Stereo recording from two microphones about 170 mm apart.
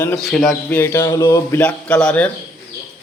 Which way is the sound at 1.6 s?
5° left (ahead or behind).